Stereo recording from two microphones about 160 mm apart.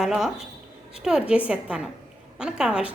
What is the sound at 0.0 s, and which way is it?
A woman's voice, 5° right (ahead or behind).